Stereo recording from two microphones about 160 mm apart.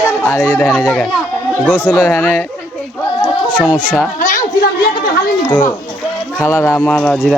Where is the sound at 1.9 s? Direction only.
15° left (ahead or behind).